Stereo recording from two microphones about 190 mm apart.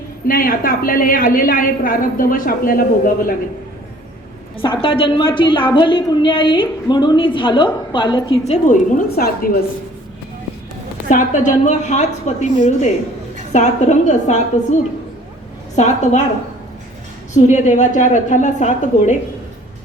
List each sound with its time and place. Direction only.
0.3 s a woman's voice: 50° left (ahead or behind)
4.5 s a woman's voice: 25° left (ahead or behind)
8.6 s a woman's voice: 45° left (ahead or behind)
11.1 s a woman's voice: 45° left (ahead or behind)
17.3 s a woman's voice: 40° left (ahead or behind)